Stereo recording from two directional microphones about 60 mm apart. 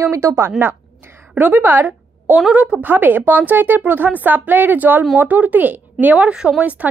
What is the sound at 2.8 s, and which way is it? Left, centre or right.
A woman's voice, right.